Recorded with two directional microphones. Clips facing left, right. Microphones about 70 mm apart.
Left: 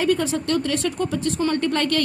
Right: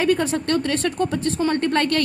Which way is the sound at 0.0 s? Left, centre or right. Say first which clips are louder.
Right 1 dB; right.